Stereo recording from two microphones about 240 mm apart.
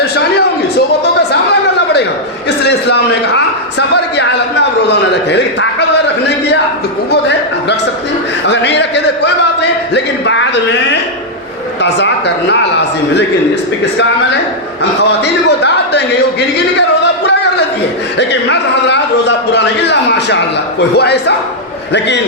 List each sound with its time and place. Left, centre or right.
2.5 s a sound: left
11.8 s speech: left
15.0 s a man's voice: left
18.2 s a man's voice: left